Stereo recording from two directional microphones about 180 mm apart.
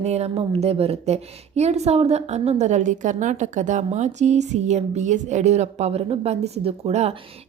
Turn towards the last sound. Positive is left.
turn(degrees=-35)  # may be behind; listen again after turning